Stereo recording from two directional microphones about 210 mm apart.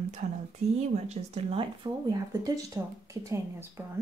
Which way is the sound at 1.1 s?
30° right (ahead or behind).